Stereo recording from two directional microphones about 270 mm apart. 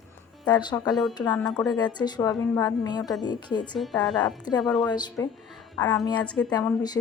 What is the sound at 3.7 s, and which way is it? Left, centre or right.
Speech, centre.